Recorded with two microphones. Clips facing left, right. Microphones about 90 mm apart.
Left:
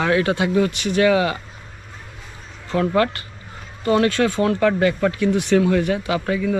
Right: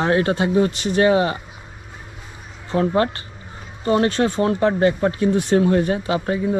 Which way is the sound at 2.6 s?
30° right (ahead or behind).